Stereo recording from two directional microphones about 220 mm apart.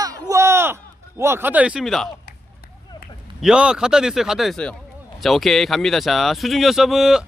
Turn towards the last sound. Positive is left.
turn(degrees=0)  # may be behind; listen again after turning